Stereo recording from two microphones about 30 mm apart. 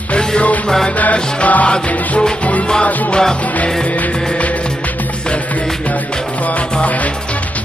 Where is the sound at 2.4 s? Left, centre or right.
Left.